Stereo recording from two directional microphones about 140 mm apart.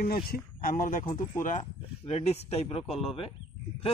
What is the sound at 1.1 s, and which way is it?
Speech, 65° left (ahead or behind).